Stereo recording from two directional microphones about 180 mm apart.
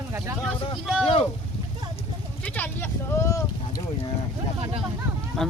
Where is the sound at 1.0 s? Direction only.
35° left (ahead or behind).